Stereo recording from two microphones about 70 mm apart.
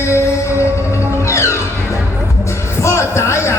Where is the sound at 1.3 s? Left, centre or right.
Left.